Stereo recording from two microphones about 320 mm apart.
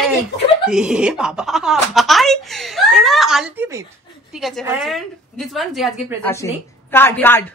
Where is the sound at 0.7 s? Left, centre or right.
Centre.